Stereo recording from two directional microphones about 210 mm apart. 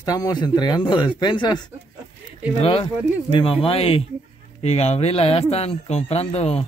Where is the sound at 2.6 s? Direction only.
25° left (ahead or behind).